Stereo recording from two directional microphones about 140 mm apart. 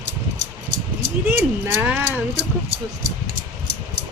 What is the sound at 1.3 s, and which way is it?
Speech, 15° right (ahead or behind).